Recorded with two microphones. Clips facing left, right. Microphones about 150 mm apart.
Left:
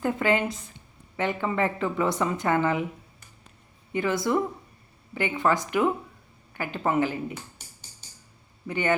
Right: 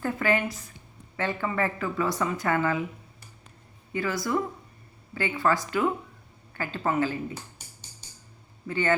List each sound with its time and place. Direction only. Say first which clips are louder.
0.0 s a woman's voice: left 2 dB; 20° left (ahead or behind)
3.9 s a woman's voice: left 3 dB; 20° left (ahead or behind)
8.6 s speech: even; 15° left (ahead or behind)